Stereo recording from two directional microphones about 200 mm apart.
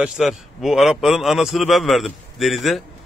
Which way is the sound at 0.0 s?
Centre (ahead or behind).